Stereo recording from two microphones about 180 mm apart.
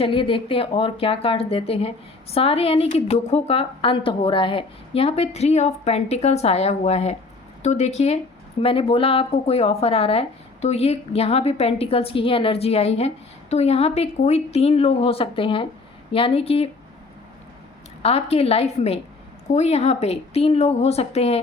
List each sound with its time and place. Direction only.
0.0 s speech: 30° left (ahead or behind)
18.0 s speech: 35° left (ahead or behind)